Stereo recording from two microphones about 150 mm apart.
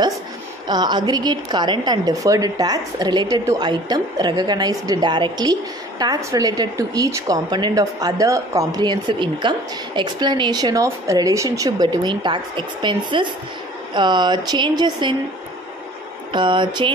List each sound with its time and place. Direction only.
0.7 s a woman's voice: 30° right (ahead or behind)
16.3 s speech: 35° right (ahead or behind)